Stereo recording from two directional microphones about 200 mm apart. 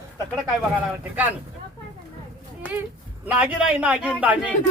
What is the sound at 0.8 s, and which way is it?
Speech, 10° right (ahead or behind).